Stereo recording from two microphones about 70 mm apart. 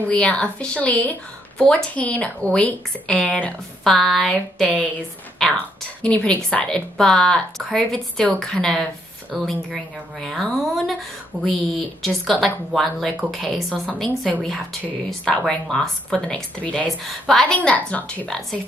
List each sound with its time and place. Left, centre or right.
0.1 s speech: centre
3.8 s a woman's voice: centre
6.0 s speech: centre
6.7 s a woman's voice: centre
17.5 s speech: centre